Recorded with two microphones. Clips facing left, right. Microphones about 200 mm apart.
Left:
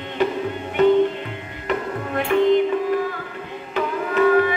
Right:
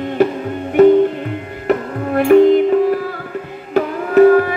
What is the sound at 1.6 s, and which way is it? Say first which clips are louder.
Music: right 7 dB; 45° right (ahead or behind).